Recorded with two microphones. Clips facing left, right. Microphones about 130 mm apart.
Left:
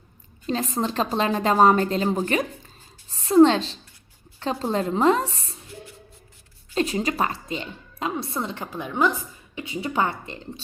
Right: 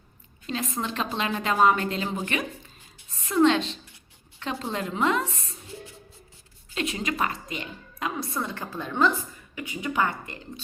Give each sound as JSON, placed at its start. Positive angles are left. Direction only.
{"t": 0.4, "sound": "a woman's voice", "side_deg": 35}
{"t": 6.7, "sound": "a woman's voice", "side_deg": 35}
{"t": 9.6, "sound": "a woman's voice", "side_deg": 25}